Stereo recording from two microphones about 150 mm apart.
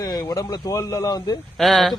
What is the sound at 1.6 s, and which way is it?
Speech, centre (ahead or behind).